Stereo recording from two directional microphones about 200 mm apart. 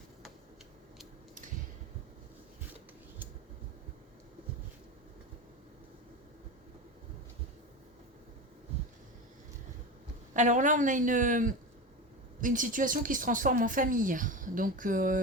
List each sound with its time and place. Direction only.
10.3 s speech: 40° right (ahead or behind)